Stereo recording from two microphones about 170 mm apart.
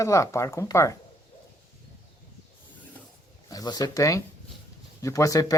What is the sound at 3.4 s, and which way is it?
Speech, 20° left (ahead or behind).